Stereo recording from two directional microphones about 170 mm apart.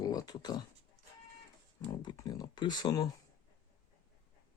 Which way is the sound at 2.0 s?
25° left (ahead or behind).